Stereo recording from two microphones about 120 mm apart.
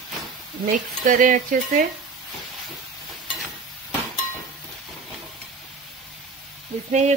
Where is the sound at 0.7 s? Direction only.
90° right.